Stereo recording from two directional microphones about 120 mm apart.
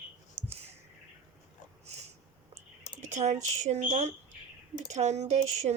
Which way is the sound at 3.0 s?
85° right.